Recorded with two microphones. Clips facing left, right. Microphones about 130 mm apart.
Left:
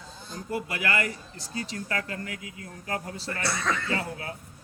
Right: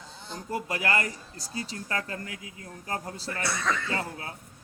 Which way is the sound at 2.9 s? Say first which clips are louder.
Left 1 dB; 35° right (ahead or behind).